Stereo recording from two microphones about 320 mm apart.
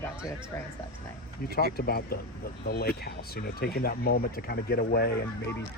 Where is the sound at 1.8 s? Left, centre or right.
Left.